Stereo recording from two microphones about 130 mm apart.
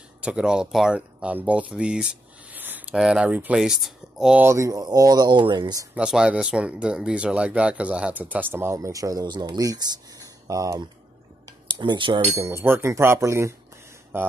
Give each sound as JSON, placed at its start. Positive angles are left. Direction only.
{"t": 0.2, "sound": "speech", "side_deg": -5}
{"t": 4.5, "sound": "speech", "side_deg": -25}
{"t": 5.9, "sound": "speech", "side_deg": -5}
{"t": 12.4, "sound": "speech", "side_deg": -20}